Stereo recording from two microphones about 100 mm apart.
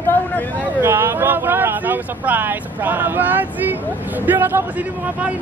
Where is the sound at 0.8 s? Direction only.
20° right (ahead or behind).